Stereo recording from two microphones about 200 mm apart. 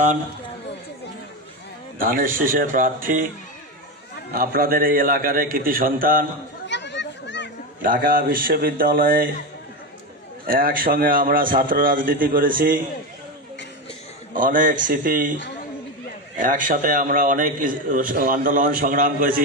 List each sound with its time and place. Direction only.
2.0 s a man's voice: 45° right (ahead or behind)
4.3 s a man's voice: 45° right (ahead or behind)
6.7 s children playing: 60° left (ahead or behind)
7.8 s a man's voice: 45° right (ahead or behind)
10.4 s a man's voice: 45° right (ahead or behind)
14.3 s a man's voice: 40° right (ahead or behind)
16.4 s a man's voice: 40° right (ahead or behind)